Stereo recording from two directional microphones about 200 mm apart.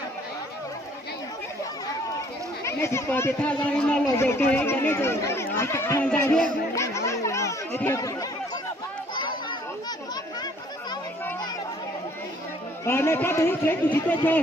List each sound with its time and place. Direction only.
2.6 s speech: 15° left (ahead or behind)
6.7 s chatter: 15° left (ahead or behind)
9.1 s children playing: 25° left (ahead or behind)
12.8 s speech: 10° left (ahead or behind)